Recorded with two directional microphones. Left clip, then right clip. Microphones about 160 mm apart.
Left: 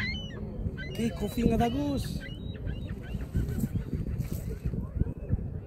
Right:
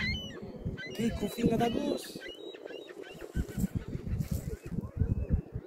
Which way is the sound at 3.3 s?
30° left (ahead or behind).